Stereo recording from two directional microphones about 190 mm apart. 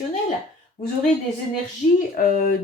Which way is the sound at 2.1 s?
45° left (ahead or behind).